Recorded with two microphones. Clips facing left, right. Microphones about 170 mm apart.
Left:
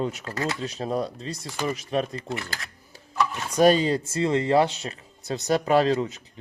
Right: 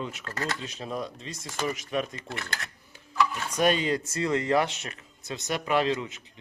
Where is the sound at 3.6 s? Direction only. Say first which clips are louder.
Left 6 dB; 35° left (ahead or behind).